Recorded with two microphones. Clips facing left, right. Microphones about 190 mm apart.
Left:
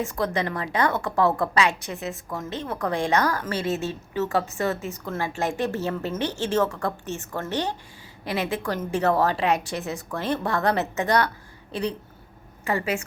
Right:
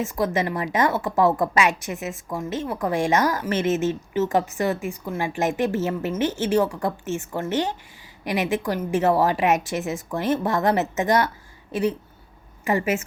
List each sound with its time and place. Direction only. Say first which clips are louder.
0.2 s a woman's voice: right 4 dB; 15° right (ahead or behind)
12.6 s a woman's voice: right 3 dB; 20° right (ahead or behind)